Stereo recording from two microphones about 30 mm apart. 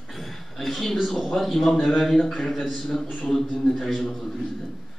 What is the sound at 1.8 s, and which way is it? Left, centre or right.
A man's voice, centre.